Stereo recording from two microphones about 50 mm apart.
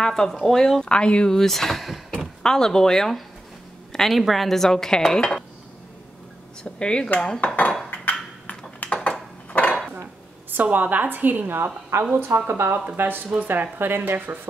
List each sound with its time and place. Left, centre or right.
0.0 s speech: centre
0.8 s speech: left
1.3 s speech: centre
2.1 s speech: centre
3.9 s a sound: centre
4.2 s speech: centre
6.6 s speech: centre
7.3 s dishes: left
7.9 s ping: left
9.1 s a sound: left
10.5 s speech: right
11.9 s speech: right